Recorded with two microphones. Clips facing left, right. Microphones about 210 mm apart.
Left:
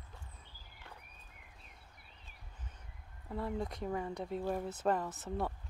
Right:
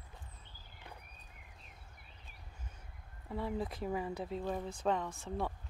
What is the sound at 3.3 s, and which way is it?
Speech, centre (ahead or behind).